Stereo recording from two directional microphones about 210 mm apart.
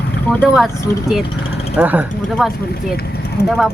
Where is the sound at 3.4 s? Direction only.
50° left (ahead or behind).